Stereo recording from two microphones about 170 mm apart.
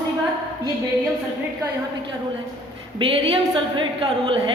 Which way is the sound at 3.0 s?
30° right (ahead or behind).